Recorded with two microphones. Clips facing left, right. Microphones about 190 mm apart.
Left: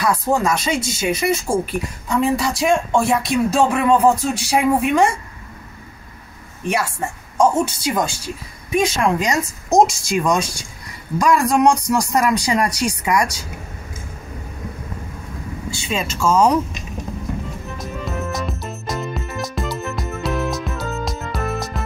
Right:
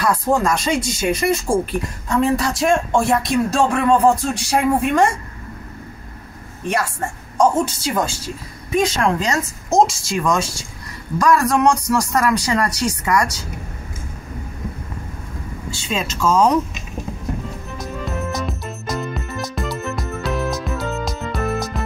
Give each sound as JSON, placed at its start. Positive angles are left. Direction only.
{"t": 0.0, "sound": "speech", "side_deg": 5}
{"t": 7.3, "sound": "speech", "side_deg": 10}
{"t": 15.9, "sound": "speech", "side_deg": 5}
{"t": 17.7, "sound": "music", "side_deg": 0}